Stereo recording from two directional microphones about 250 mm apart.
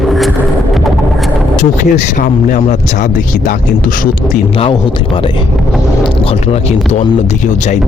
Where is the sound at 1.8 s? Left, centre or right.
Left.